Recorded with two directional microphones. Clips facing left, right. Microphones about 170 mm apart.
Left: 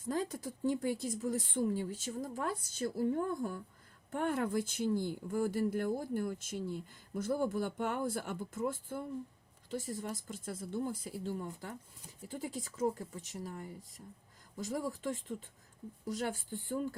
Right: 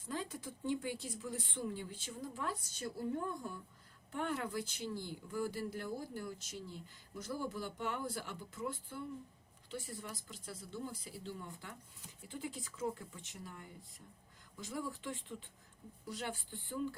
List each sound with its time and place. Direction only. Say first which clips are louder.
0.1 s speech: left 6 dB; 40° left (ahead or behind)
4.1 s speech: left 6 dB; 50° left (ahead or behind)